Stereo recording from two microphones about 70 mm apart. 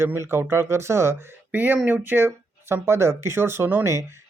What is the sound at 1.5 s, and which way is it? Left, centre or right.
Speech, right.